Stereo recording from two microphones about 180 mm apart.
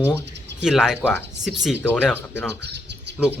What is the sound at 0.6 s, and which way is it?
Speech, centre (ahead or behind).